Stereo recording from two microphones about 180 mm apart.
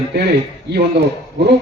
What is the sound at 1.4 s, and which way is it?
Speech, 70° right (ahead or behind).